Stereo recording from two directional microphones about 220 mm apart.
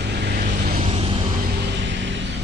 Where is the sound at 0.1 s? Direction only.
45° right (ahead or behind).